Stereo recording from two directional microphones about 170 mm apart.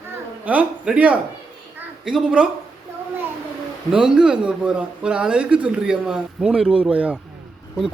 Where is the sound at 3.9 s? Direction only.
5° right (ahead or behind).